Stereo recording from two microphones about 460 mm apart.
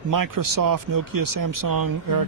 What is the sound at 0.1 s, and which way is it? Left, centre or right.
Speech, right.